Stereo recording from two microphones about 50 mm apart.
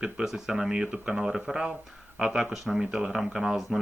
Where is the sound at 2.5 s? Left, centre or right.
Centre.